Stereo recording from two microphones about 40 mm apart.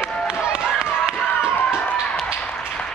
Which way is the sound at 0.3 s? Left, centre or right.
Right.